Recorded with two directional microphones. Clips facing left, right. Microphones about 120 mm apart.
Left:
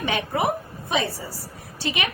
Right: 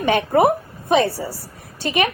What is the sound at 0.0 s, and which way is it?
A woman's voice, 55° right (ahead or behind).